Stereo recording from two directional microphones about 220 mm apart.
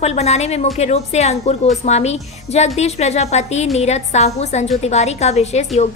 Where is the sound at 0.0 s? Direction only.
30° left (ahead or behind).